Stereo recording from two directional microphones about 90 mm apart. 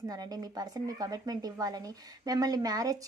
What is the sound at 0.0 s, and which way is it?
Speech, 45° right (ahead or behind).